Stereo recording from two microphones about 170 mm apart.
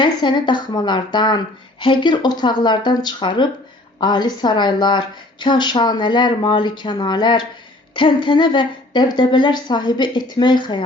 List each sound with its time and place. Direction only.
0.0 s a woman's voice: 25° left (ahead or behind)